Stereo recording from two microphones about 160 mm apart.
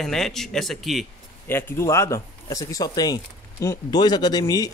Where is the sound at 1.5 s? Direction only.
15° left (ahead or behind).